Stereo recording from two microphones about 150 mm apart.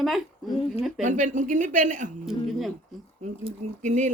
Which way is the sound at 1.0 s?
55° right (ahead or behind).